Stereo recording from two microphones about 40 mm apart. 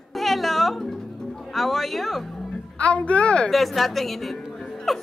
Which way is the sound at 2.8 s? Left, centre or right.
Left.